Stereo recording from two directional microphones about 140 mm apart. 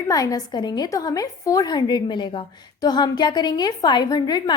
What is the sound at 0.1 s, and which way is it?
A woman's voice, 25° left (ahead or behind).